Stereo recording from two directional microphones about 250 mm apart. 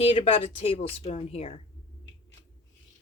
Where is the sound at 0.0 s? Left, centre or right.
Left.